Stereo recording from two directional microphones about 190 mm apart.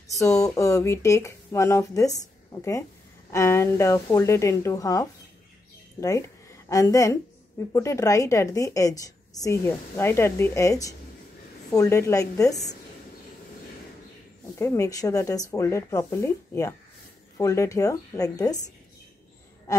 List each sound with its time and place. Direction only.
0.1 s a woman's voice: 15° left (ahead or behind)
14.6 s a woman's voice: 15° left (ahead or behind)